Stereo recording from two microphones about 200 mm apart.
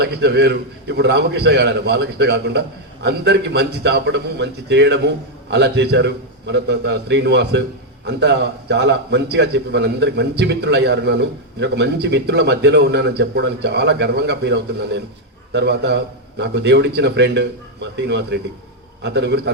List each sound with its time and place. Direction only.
0.0 s a man's voice: 55° right (ahead or behind)